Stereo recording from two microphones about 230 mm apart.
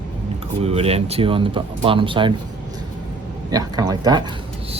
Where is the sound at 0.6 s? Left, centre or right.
Right.